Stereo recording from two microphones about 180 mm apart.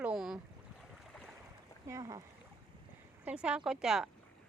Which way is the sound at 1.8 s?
15° right (ahead or behind).